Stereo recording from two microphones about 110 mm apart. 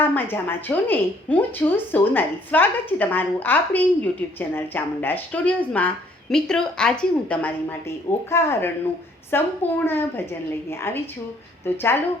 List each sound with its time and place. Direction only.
0.0 s a woman's voice: 20° left (ahead or behind)